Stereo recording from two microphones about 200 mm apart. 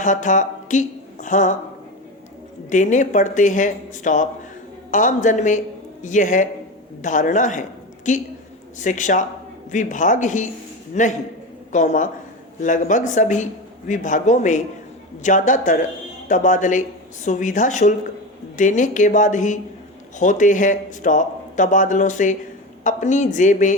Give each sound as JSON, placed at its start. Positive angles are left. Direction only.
{"t": 0.0, "sound": "speech", "side_deg": 40}
{"t": 2.6, "sound": "a man's voice", "side_deg": 40}